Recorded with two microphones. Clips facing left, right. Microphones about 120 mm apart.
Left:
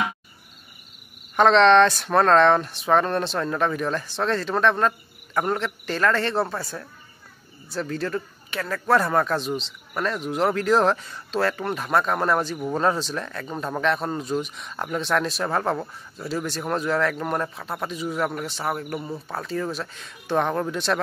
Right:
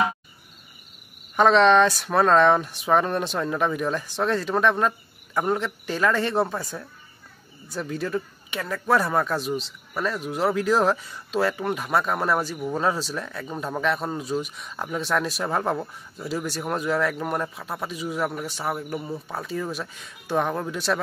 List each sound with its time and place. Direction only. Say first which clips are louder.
1.3 s speech: left 1 dB; 10° right (ahead or behind)